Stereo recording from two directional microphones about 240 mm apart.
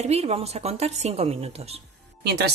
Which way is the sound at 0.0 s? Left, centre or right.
Right.